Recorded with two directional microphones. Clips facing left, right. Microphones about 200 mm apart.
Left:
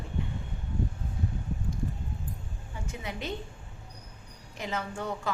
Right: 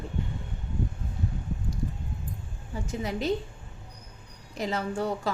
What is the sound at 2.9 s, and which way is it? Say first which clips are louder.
Speech: right 8 dB; 35° right (ahead or behind).